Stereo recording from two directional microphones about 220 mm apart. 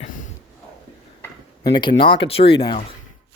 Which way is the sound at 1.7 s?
20° left (ahead or behind).